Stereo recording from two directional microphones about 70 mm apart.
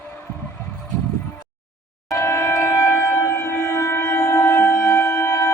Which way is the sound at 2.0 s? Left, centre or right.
Left.